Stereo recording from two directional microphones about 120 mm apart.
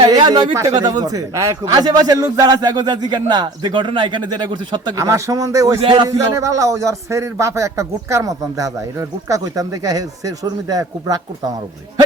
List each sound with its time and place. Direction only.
0.0 s a man's voice: 35° right (ahead or behind)
4.9 s a man's voice: 25° right (ahead or behind)